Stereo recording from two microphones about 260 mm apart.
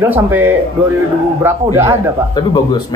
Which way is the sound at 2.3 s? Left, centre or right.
Centre.